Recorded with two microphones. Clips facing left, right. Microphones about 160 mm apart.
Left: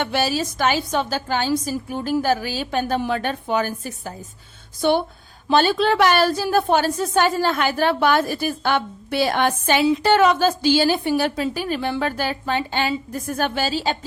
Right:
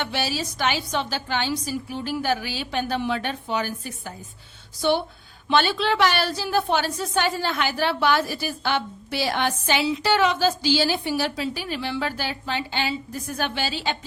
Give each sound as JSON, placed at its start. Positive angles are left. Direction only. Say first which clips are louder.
{"t": 0.0, "sound": "a woman's voice", "louder": "left 5 dB", "side_deg": 50}